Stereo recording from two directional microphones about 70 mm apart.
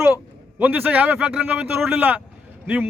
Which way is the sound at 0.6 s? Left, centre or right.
Right.